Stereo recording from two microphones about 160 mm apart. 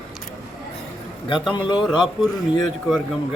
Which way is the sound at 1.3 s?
30° left (ahead or behind).